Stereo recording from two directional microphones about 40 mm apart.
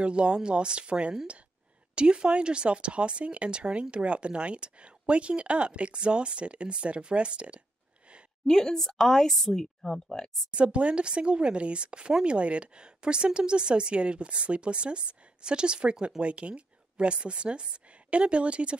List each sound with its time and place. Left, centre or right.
0.0 s speech: right
8.5 s speech: centre
10.5 s speech: right